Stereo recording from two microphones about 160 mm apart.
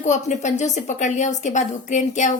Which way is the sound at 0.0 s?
50° left (ahead or behind).